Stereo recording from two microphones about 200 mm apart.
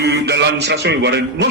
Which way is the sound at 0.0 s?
55° right (ahead or behind).